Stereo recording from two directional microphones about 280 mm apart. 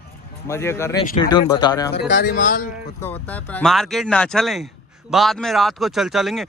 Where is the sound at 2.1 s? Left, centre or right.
Left.